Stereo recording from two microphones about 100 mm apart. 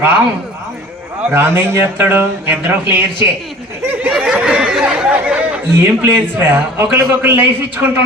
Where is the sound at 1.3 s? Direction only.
25° right (ahead or behind).